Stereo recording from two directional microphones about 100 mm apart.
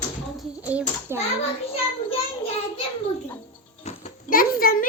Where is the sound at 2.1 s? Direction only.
70° left (ahead or behind).